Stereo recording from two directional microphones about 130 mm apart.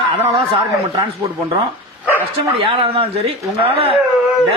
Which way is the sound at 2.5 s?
45° right (ahead or behind).